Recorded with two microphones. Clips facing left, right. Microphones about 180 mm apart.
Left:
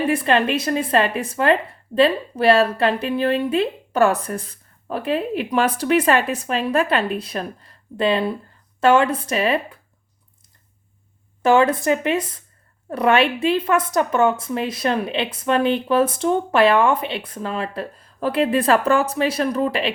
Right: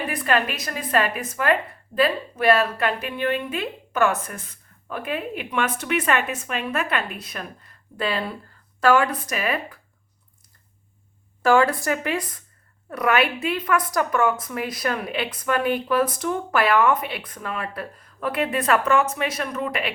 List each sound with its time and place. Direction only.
0.1 s a woman's voice: 25° left (ahead or behind)
11.4 s a woman's voice: 20° left (ahead or behind)